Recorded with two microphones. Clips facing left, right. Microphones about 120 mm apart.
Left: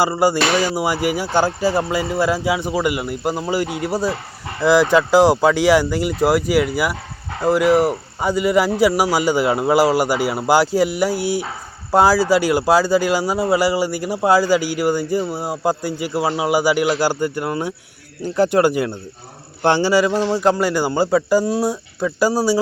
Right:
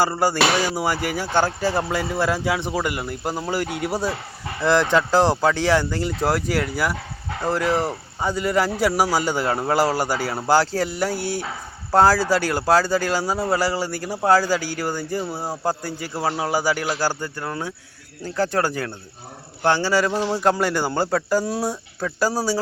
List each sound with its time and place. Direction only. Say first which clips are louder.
0.0 s speech: left 3 dB; 10° left (ahead or behind)